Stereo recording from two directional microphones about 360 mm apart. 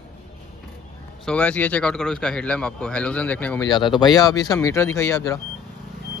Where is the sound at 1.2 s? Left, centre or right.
Centre.